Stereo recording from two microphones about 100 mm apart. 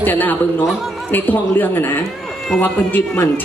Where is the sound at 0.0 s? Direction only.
20° left (ahead or behind).